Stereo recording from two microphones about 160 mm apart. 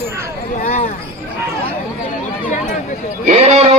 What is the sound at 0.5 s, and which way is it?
Speech, 50° left (ahead or behind).